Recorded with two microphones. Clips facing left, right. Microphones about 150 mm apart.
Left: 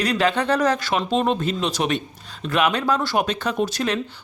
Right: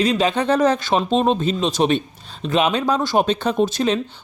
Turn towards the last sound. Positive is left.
turn(degrees=-20)  # may be behind; listen again after turning